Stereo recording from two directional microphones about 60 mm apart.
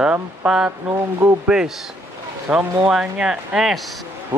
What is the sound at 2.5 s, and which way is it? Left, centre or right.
Speech, centre.